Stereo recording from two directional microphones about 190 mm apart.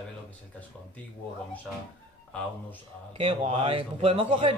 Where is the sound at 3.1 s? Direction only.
30° right (ahead or behind).